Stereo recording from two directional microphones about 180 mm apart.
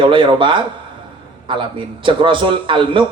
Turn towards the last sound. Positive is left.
turn(degrees=-30)  # may be behind; listen again after turning